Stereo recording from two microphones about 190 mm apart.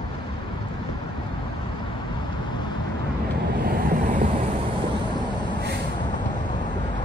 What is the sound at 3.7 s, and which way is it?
Vehicle, 45° right (ahead or behind).